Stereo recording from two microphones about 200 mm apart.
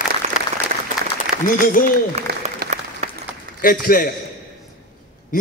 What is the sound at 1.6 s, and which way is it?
Speech, 45° left (ahead or behind).